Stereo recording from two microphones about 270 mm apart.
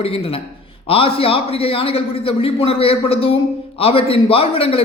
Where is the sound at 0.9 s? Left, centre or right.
Left.